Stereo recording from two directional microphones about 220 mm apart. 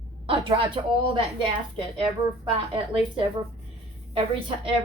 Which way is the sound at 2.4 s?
20° right (ahead or behind).